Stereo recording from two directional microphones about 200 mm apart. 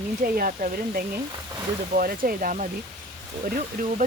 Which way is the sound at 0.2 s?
45° right (ahead or behind).